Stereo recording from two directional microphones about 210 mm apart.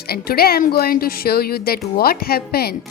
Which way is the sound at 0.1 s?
45° left (ahead or behind).